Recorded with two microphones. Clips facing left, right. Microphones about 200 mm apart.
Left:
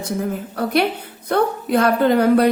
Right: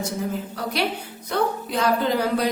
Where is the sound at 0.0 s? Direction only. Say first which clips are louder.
Left 3 dB; 55° left (ahead or behind).